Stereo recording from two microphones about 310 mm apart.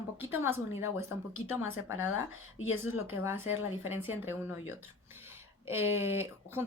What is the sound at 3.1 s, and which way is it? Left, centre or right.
A woman's voice, centre.